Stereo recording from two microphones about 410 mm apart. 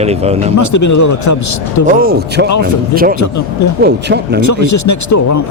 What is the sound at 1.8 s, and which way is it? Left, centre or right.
Speech, right.